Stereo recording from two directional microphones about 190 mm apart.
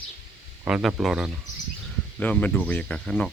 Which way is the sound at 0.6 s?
5° right (ahead or behind).